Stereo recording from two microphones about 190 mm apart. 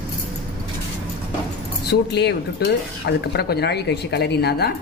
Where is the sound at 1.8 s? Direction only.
60° left (ahead or behind).